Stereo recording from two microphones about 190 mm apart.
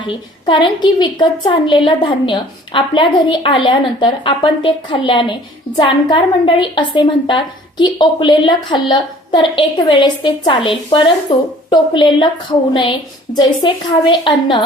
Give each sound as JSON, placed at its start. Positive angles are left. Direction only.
{"t": 0.0, "sound": "a woman's voice", "side_deg": 25}